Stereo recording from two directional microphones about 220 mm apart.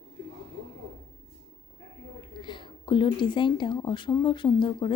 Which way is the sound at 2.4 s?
20° left (ahead or behind).